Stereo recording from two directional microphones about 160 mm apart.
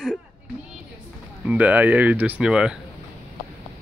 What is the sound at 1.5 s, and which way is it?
Speech, 10° right (ahead or behind).